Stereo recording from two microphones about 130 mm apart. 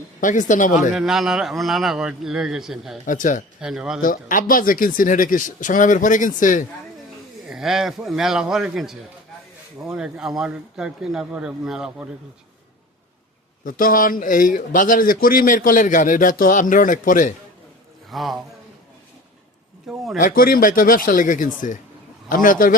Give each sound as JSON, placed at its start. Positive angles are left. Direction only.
{"t": 0.2, "sound": "speech", "side_deg": 80}
{"t": 0.9, "sound": "speech", "side_deg": -5}
{"t": 3.1, "sound": "speech", "side_deg": 90}
{"t": 3.6, "sound": "speech", "side_deg": -5}
{"t": 4.0, "sound": "a man's voice", "side_deg": 90}
{"t": 7.4, "sound": "speech", "side_deg": -5}
{"t": 13.7, "sound": "a man's voice", "side_deg": 90}
{"t": 18.1, "sound": "speech", "side_deg": 0}
{"t": 20.1, "sound": "a man's voice", "side_deg": 90}